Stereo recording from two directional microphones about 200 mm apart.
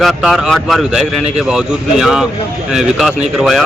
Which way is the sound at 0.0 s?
Centre (ahead or behind).